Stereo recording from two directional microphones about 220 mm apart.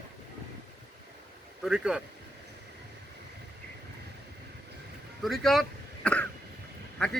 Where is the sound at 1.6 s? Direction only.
5° right (ahead or behind).